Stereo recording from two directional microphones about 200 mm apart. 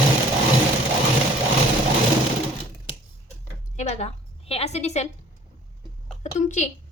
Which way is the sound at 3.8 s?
35° left (ahead or behind).